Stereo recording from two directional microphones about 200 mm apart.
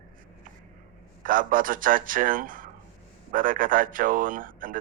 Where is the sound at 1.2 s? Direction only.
45° right (ahead or behind).